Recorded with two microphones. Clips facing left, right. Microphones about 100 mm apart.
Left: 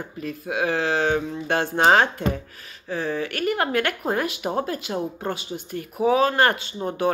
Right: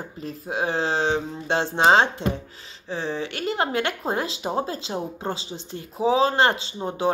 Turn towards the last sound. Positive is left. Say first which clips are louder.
# left 1 dB
turn(degrees=-20)  # may be behind; listen again after turning